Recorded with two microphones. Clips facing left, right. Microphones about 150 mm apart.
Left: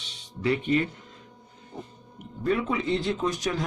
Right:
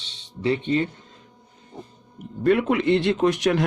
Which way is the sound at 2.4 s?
75° right (ahead or behind).